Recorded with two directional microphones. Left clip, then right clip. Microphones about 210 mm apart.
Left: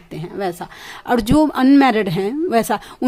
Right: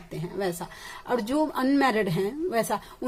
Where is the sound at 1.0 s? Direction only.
45° left (ahead or behind).